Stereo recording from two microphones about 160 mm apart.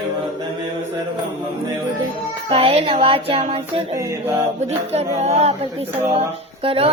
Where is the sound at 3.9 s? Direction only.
20° right (ahead or behind).